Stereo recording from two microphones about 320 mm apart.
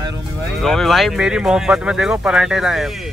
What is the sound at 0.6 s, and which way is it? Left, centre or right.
Speech, centre.